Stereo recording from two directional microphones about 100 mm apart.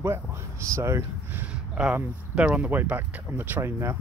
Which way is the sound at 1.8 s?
10° right (ahead or behind).